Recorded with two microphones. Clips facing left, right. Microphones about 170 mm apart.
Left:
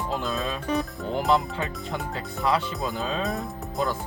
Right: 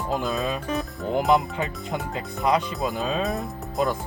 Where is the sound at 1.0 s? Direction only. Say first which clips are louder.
Right 4 dB; 15° right (ahead or behind).